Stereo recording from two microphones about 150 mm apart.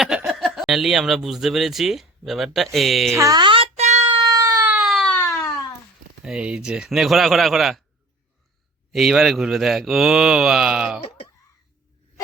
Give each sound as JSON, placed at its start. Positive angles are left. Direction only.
{"t": 0.3, "sound": "speech", "side_deg": 0}
{"t": 3.2, "sound": "a sound", "side_deg": -25}
{"t": 4.2, "sound": "baby cry", "side_deg": -25}
{"t": 4.9, "sound": "baby cry", "side_deg": 5}
{"t": 6.2, "sound": "a man's voice", "side_deg": -5}
{"t": 8.9, "sound": "a man's voice", "side_deg": 0}